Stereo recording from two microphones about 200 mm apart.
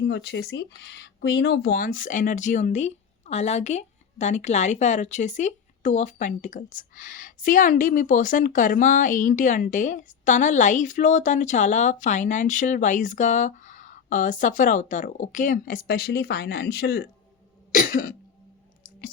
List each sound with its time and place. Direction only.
0.1 s speech: 60° left (ahead or behind)
17.7 s cough: 45° left (ahead or behind)